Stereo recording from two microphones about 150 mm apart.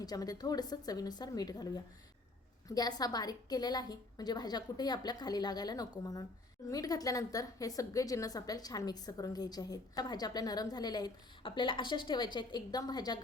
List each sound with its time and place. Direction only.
0.0 s speech: 25° left (ahead or behind)